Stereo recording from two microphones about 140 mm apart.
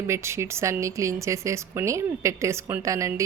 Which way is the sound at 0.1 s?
20° right (ahead or behind).